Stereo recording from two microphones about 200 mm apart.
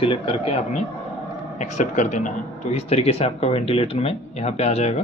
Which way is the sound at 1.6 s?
35° left (ahead or behind).